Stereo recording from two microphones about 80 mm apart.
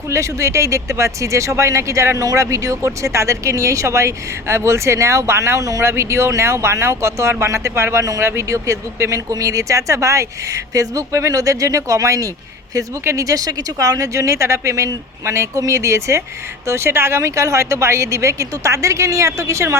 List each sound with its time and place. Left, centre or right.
0.1 s speech: right